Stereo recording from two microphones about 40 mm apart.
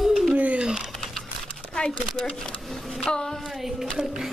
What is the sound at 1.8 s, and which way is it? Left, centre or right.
Speech, left.